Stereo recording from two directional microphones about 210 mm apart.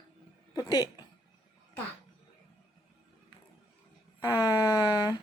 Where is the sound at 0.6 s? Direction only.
20° left (ahead or behind).